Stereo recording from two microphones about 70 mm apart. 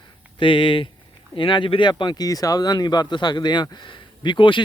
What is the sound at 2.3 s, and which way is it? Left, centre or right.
Speech, left.